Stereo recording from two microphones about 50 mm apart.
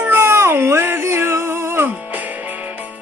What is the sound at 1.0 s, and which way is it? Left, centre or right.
Music, right.